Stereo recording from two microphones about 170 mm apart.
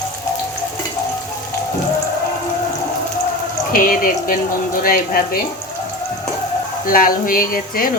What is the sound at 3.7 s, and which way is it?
Speech, 55° left (ahead or behind).